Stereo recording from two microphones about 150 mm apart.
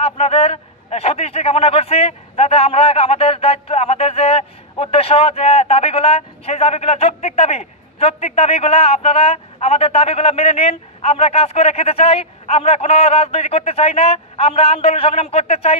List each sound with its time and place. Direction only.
0.0 s a man's voice: 40° left (ahead or behind)